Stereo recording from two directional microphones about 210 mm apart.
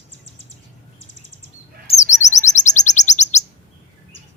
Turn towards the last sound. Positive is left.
turn(degrees=35)  # may be behind; listen again after turning